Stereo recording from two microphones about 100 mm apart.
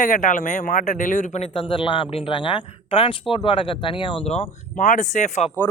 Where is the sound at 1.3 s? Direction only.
75° left (ahead or behind).